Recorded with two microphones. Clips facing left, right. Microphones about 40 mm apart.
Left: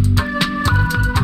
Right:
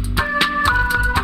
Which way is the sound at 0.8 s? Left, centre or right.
Centre.